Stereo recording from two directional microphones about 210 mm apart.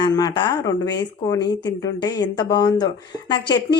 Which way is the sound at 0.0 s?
20° left (ahead or behind).